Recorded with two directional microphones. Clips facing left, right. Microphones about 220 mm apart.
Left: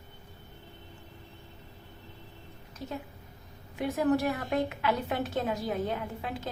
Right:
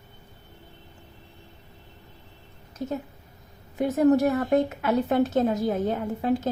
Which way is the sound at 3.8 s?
40° right (ahead or behind).